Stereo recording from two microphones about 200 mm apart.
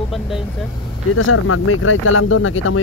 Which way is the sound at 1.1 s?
90° left.